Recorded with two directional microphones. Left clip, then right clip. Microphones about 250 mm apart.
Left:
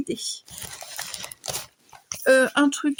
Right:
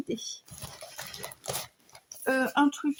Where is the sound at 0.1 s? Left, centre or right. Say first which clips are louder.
Left 5 dB; left.